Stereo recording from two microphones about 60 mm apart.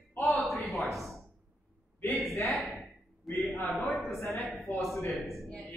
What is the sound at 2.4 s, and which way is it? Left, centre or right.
Speech, centre.